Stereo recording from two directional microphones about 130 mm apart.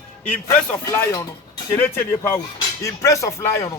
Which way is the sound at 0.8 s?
25° left (ahead or behind).